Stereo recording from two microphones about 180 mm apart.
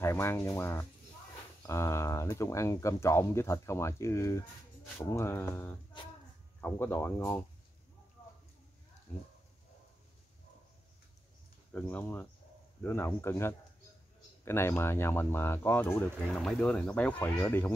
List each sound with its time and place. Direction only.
0.0 s speech: 15° left (ahead or behind)
9.1 s speech: 10° left (ahead or behind)
11.7 s speech: 10° left (ahead or behind)